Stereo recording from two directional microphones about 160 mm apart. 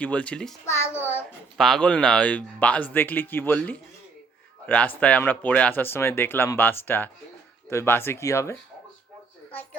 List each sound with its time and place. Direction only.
0.0 s speech: 10° left (ahead or behind)
0.6 s speech: 15° left (ahead or behind)
1.5 s speech: centre (ahead or behind); by 8.5 s 20° left (ahead or behind)